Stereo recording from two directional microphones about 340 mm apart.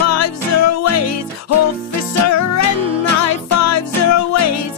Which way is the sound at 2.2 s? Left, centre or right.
Left.